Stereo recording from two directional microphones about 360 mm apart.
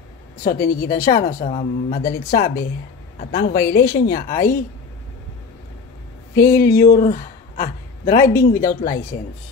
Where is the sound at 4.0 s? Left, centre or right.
Left.